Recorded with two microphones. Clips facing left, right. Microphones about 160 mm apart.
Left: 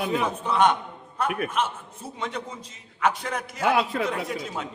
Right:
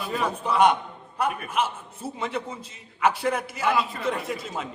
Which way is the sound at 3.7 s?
70° left (ahead or behind).